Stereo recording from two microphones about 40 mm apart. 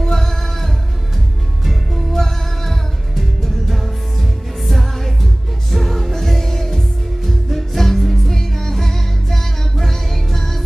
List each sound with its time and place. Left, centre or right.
0.0 s music: centre